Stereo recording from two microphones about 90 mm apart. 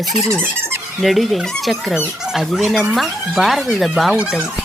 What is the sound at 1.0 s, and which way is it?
A child's voice, centre (ahead or behind).